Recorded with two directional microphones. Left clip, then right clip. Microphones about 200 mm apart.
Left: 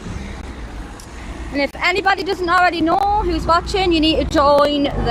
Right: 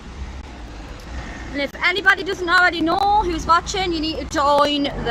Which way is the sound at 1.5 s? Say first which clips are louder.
Left 3 dB; 10° left (ahead or behind).